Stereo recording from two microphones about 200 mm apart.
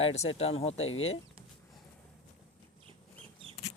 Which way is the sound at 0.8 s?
80° left.